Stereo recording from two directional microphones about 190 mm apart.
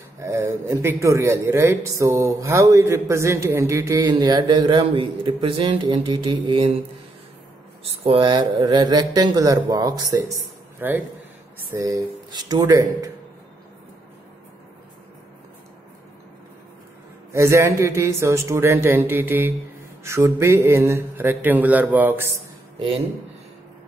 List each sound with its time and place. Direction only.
0.2 s a man's voice: 15° right (ahead or behind)
7.8 s a man's voice: 30° right (ahead or behind)
10.1 s a sound: 15° right (ahead or behind)
11.7 s a man's voice: 20° right (ahead or behind)
17.3 s a man's voice: 15° right (ahead or behind)
22.8 s a man's voice: 30° right (ahead or behind)